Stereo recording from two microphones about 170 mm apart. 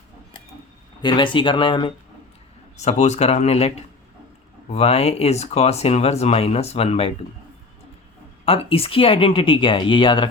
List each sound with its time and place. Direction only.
1.0 s speech: 30° left (ahead or behind)
2.7 s speech: 40° left (ahead or behind)
8.4 s speech: 35° left (ahead or behind)